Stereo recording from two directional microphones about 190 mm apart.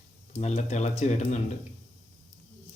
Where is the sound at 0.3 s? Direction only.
35° left (ahead or behind).